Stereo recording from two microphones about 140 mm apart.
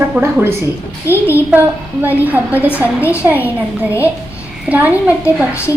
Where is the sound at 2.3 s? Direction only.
10° right (ahead or behind).